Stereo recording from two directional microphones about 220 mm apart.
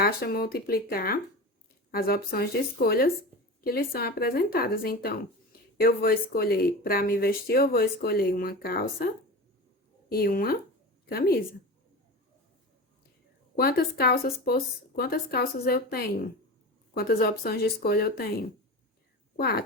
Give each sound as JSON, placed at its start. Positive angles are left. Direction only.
{"t": 0.0, "sound": "speech", "side_deg": 45}
{"t": 10.1, "sound": "a woman's voice", "side_deg": 40}
{"t": 13.6, "sound": "speech", "side_deg": 45}